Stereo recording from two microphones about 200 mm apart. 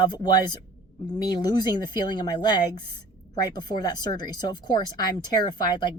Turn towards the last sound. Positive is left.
turn(degrees=20)  # may be behind; listen again after turning